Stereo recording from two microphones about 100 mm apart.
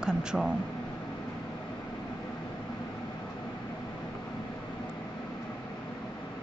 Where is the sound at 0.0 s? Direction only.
5° right (ahead or behind).